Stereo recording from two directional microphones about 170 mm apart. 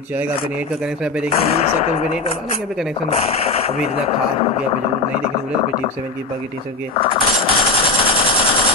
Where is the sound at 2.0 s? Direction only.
35° left (ahead or behind).